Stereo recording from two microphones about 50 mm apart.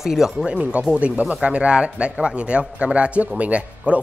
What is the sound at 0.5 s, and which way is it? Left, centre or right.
Speech, right.